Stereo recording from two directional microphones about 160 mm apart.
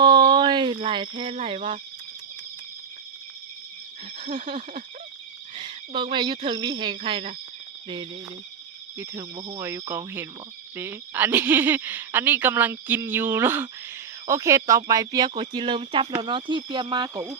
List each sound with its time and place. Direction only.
0.0 s a sound: 30° right (ahead or behind)
4.2 s speech: 35° right (ahead or behind)
9.3 s speech: 30° right (ahead or behind)
9.6 s a woman's voice: 15° right (ahead or behind)